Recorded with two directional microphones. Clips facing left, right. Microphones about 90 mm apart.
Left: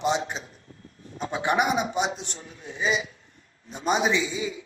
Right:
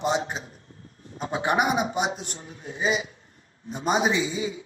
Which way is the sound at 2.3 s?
30° right (ahead or behind).